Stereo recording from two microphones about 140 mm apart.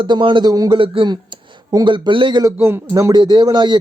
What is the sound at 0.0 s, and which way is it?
A man's voice, 35° right (ahead or behind).